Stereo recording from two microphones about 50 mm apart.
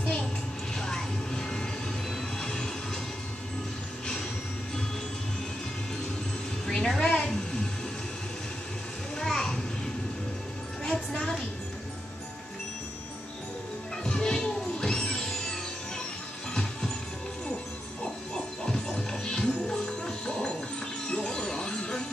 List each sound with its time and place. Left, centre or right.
0.7 s vehicle: centre
2.4 s music: centre
6.7 s a sound: centre
9.2 s children playing: centre
10.8 s music: centre
14.0 s music: centre
18.3 s music: centre